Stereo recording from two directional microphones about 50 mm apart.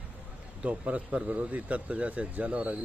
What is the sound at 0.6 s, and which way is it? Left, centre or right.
Speech, right.